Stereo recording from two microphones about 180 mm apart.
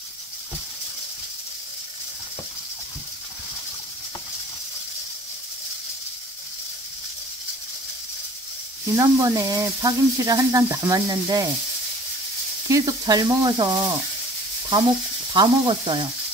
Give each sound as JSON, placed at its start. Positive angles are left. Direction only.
{"t": 8.8, "sound": "speech", "side_deg": -20}
{"t": 12.6, "sound": "speech", "side_deg": -20}
{"t": 15.3, "sound": "speech", "side_deg": -25}